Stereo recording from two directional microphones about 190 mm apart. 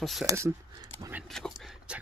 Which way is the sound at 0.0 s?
Centre (ahead or behind).